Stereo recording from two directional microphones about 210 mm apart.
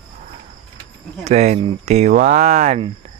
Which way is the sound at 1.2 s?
35° right (ahead or behind).